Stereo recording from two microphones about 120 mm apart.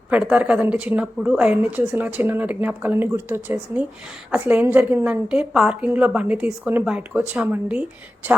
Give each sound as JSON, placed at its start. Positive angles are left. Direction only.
{"t": 0.1, "sound": "a woman's voice", "side_deg": -10}